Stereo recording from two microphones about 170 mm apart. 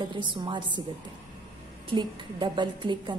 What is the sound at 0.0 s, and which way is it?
Speech, 30° right (ahead or behind).